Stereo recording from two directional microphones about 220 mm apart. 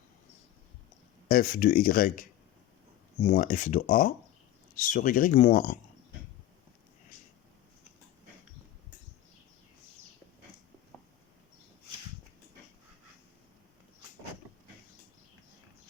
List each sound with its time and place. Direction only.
1.3 s speech: 40° left (ahead or behind)